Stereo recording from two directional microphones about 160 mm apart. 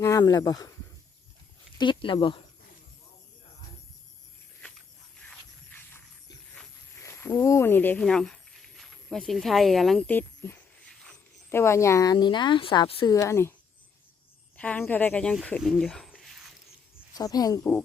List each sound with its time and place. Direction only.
0.0 s speech: 20° left (ahead or behind)
1.8 s speech: 30° left (ahead or behind)
5.2 s a sound: 10° left (ahead or behind)
7.0 s speech: 15° left (ahead or behind)
11.0 s a sound: 5° left (ahead or behind)
11.5 s speech: 15° left (ahead or behind)
13.1 s speech: 20° left (ahead or behind)
14.5 s speech: 10° left (ahead or behind)
17.2 s speech: 25° left (ahead or behind)